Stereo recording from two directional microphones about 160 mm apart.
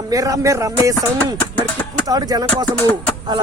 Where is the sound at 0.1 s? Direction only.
20° right (ahead or behind).